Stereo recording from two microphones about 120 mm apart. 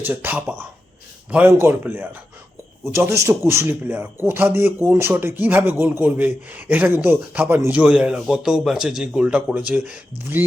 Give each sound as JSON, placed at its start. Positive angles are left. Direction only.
{"t": 0.0, "sound": "speech", "side_deg": -15}